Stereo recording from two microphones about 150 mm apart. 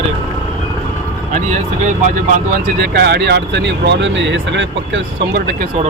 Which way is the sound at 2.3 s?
80° right.